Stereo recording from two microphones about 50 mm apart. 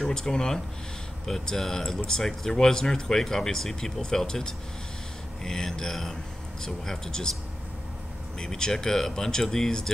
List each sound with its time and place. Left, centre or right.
0.0 s speech: centre
8.4 s speech: centre